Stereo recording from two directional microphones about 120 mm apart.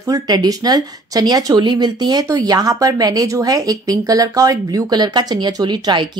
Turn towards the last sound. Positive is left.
turn(degrees=-40)  # may be behind; listen again after turning